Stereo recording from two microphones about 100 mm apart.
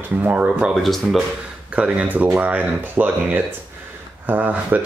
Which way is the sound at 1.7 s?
10° right (ahead or behind).